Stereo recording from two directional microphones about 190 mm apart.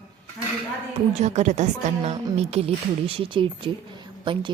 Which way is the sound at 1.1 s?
35° right (ahead or behind).